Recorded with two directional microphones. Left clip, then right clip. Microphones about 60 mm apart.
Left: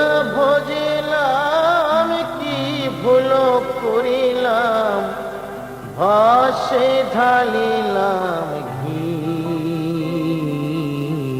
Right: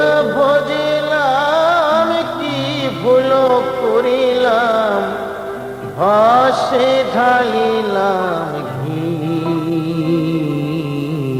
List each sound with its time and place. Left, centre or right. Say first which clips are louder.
0.0 s music: right 3 dB; left
3.2 s music: right 3 dB; left
6.0 s mantra: right 2 dB; left